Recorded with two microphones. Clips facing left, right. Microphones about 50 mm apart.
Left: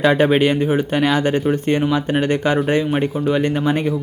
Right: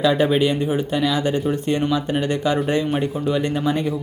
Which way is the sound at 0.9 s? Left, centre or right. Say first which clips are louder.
Left 3 dB; left.